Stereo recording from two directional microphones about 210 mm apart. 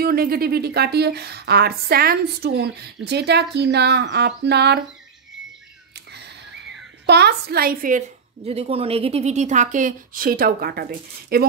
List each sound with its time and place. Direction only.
0.0 s a woman's voice: 45° right (ahead or behind)
7.1 s a woman's voice: 50° right (ahead or behind)
8.5 s a woman's voice: 30° right (ahead or behind); by 11.4 s 45° right (ahead or behind)